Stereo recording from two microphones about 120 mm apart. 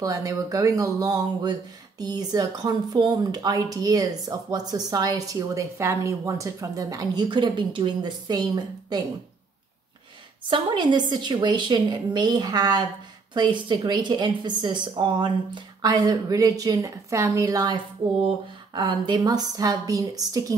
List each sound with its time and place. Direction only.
0.0 s speech: 30° right (ahead or behind)
10.5 s speech: 40° right (ahead or behind)
18.0 s speech: 45° right (ahead or behind)